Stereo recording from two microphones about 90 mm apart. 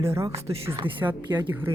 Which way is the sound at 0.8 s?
70° right (ahead or behind).